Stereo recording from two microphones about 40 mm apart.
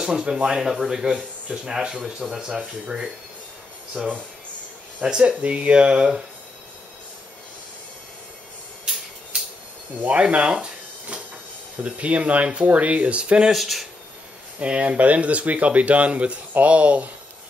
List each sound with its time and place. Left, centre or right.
0.0 s speech: centre
5.0 s speech: right
9.3 s insect: right
9.9 s speech: right
10.5 s a sound: right
11.8 s speech: right
13.5 s speech: centre
14.6 s speech: right